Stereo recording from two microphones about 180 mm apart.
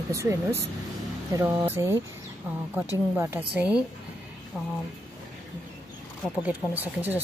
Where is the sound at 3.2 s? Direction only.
10° right (ahead or behind).